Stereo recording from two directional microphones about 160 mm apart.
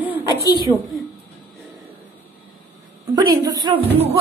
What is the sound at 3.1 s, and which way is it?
Speech, 25° right (ahead or behind).